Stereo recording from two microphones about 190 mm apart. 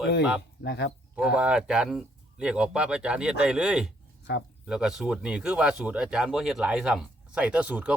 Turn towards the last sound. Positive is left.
turn(degrees=-5)  # may be behind; listen again after turning